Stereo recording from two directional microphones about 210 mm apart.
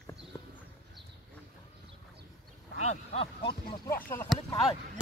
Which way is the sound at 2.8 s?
30° left (ahead or behind).